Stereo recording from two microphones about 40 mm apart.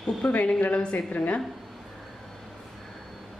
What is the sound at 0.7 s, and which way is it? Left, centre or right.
Speech, left.